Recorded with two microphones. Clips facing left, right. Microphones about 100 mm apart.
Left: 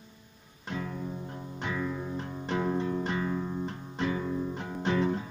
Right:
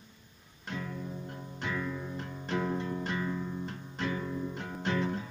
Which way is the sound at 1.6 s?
15° left (ahead or behind).